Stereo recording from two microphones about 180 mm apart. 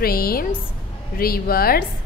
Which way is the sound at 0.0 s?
55° left (ahead or behind).